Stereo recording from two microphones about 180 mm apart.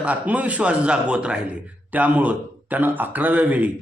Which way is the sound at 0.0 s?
10° right (ahead or behind).